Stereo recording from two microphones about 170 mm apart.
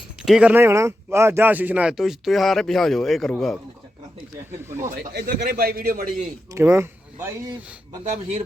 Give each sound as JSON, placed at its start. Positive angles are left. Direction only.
{"t": 0.2, "sound": "speech", "side_deg": -5}
{"t": 5.1, "sound": "a man's voice", "side_deg": -65}
{"t": 6.5, "sound": "speech", "side_deg": -15}